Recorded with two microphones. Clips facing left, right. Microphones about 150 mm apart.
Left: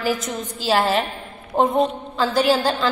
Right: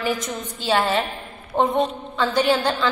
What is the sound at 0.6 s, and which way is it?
Speech, 5° left (ahead or behind).